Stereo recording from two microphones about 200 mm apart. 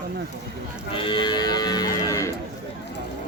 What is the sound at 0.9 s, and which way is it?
Speech, 25° left (ahead or behind).